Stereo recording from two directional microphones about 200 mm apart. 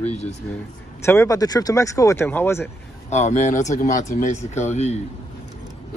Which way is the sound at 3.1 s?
35° left (ahead or behind).